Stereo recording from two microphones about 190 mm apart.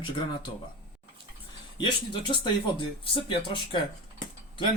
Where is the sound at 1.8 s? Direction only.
25° left (ahead or behind).